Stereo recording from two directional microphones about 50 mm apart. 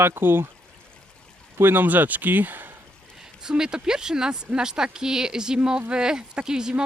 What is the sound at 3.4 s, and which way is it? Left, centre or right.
Speech, centre.